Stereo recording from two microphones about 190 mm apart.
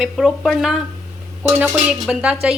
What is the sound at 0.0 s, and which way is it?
Speech, centre (ahead or behind).